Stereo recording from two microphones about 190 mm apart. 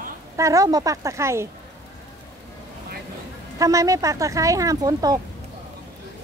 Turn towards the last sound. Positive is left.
turn(degrees=-20)  # may be behind; listen again after turning